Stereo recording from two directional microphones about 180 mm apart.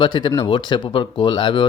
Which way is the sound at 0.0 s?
25° left (ahead or behind).